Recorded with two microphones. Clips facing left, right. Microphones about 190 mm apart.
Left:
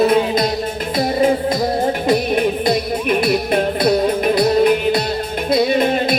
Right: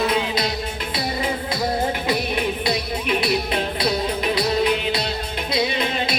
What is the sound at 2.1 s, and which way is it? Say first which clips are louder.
Music: left 7 dB; 50° left (ahead or behind).